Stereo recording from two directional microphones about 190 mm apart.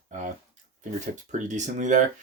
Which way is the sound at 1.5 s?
40° right (ahead or behind).